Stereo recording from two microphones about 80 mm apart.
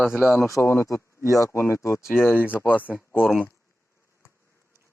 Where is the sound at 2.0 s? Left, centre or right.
Centre.